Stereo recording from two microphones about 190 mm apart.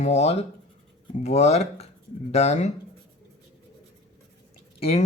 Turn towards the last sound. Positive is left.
turn(degrees=30)  # may be behind; listen again after turning